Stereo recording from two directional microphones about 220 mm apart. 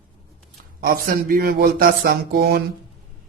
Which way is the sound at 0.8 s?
40° right (ahead or behind).